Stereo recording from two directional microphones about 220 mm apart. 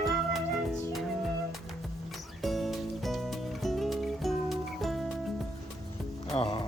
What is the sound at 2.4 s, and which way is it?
Music, centre (ahead or behind).